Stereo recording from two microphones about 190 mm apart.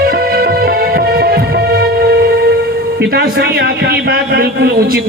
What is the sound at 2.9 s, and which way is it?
A man's voice, 55° right (ahead or behind).